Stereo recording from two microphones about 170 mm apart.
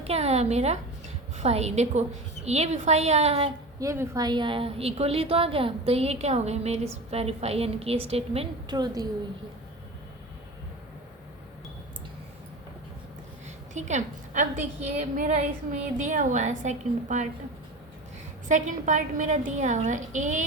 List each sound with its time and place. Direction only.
0.0 s a woman's voice: 35° right (ahead or behind)
3.8 s a woman's voice: 15° right (ahead or behind); by 8.7 s 35° right (ahead or behind)
8.7 s a woman's voice: 25° right (ahead or behind)
13.7 s a woman's voice: 45° right (ahead or behind)
18.4 s a woman's voice: 45° right (ahead or behind)